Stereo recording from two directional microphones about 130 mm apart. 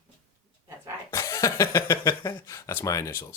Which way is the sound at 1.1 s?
25° left (ahead or behind).